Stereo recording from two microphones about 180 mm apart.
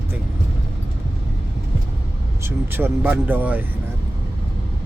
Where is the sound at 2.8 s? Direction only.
10° right (ahead or behind).